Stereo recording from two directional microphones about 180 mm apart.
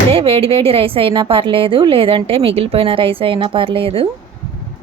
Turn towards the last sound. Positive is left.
turn(degrees=-30)  # may be behind; listen again after turning